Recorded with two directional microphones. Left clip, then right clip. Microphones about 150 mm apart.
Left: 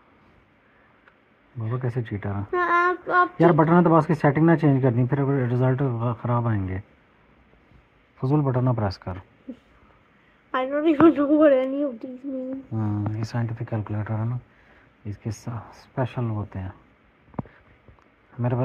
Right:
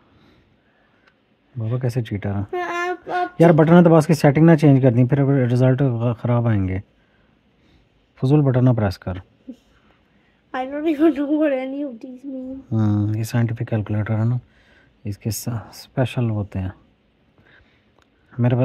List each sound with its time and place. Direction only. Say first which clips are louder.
1.8 s speech: right 4 dB; 70° right (ahead or behind)
2.5 s speech: left 4 dB; 35° right (ahead or behind)
3.3 s speech: right 4 dB; 85° right
8.2 s speech: right 6 dB; 50° right (ahead or behind)
10.5 s a woman's voice: left 1 dB; 35° right (ahead or behind)
12.8 s speech: right 8 dB; 75° right (ahead or behind); by 14.4 s 90° right
15.0 s speech: right 7 dB; 70° right (ahead or behind); by 16.7 s 85° right